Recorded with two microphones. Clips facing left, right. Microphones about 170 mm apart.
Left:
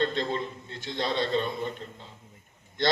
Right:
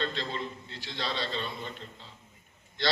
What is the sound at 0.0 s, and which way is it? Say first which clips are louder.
A man's voice: left 6 dB; 45° left (ahead or behind).